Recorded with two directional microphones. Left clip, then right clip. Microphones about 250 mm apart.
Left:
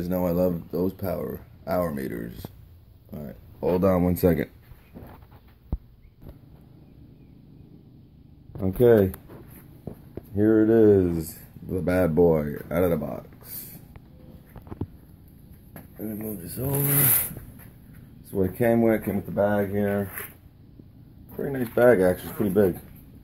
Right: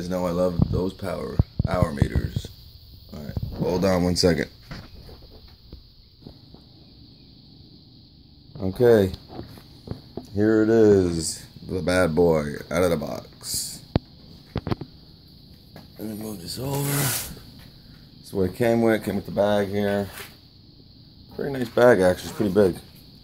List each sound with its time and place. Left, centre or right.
0.0 s speech: centre
3.8 s speech: centre
8.5 s speech: centre
10.3 s speech: centre
15.7 s speech: centre
18.3 s speech: centre
21.4 s speech: centre